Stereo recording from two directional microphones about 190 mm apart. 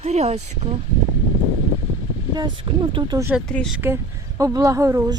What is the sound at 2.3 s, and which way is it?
Speech, 25° right (ahead or behind).